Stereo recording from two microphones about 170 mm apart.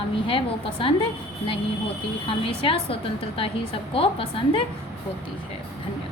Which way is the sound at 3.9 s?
30° left (ahead or behind).